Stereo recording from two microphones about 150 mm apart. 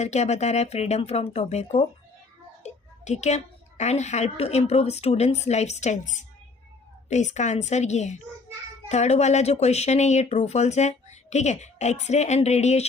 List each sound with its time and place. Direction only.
0.0 s a woman's voice: 50° left (ahead or behind)